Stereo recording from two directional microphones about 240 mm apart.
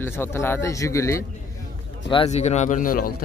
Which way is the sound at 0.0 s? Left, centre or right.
Centre.